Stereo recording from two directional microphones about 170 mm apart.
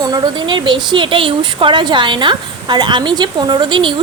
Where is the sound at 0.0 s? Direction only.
25° right (ahead or behind).